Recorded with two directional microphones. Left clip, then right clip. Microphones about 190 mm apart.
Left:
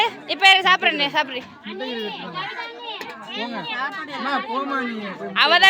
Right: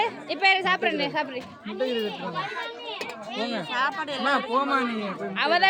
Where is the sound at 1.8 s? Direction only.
30° right (ahead or behind).